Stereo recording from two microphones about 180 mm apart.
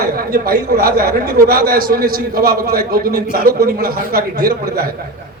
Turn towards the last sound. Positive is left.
turn(degrees=-55)  # may be behind; listen again after turning